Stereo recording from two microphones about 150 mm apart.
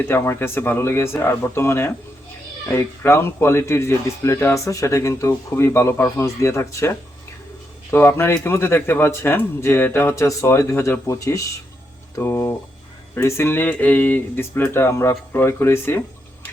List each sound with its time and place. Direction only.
0.0 s a man's voice: 15° left (ahead or behind)